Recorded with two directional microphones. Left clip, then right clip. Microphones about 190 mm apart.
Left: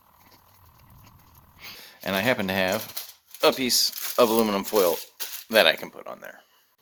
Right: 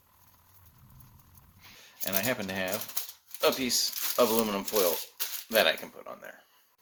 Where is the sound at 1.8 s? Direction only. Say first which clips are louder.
Left 7 dB; 30° left (ahead or behind).